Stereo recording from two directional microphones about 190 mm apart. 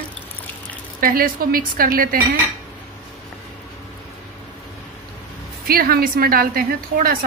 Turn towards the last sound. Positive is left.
turn(degrees=-50)  # may be behind; listen again after turning